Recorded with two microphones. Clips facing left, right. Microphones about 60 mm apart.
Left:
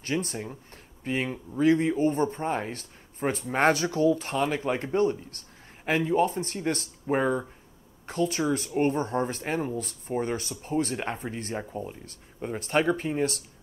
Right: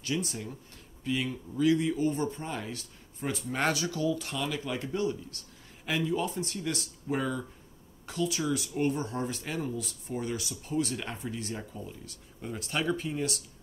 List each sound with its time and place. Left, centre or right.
0.0 s speech: left